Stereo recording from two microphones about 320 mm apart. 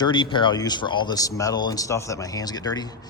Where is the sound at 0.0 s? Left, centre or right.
Centre.